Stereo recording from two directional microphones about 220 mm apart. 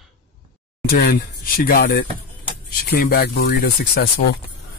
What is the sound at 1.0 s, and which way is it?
Speech, 45° left (ahead or behind).